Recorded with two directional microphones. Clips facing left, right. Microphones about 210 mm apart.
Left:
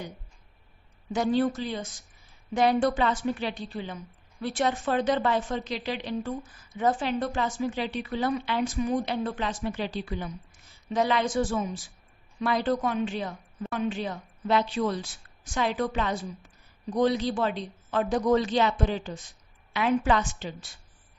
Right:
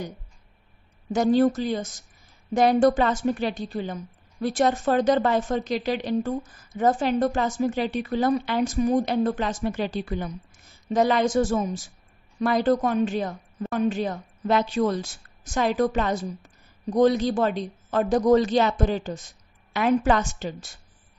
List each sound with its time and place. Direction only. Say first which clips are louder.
1.1 s a woman's voice: right 5 dB; 45° right (ahead or behind)